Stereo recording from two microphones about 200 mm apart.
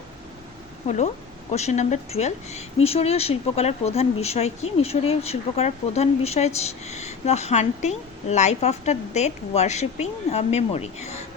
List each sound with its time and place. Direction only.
0.9 s speech: 35° left (ahead or behind)